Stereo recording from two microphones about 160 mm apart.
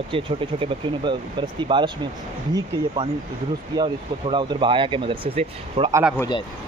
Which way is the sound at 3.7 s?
30° right (ahead or behind).